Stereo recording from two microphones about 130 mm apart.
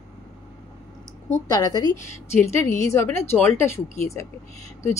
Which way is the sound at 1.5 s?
30° left (ahead or behind).